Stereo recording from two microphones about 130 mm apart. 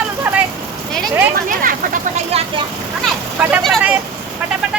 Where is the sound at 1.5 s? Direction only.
90° right.